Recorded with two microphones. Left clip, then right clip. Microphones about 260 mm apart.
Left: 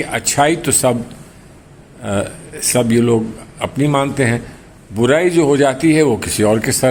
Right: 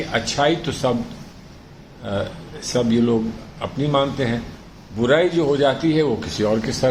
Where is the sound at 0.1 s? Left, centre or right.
Left.